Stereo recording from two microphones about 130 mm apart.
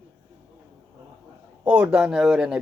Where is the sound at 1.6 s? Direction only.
10° right (ahead or behind).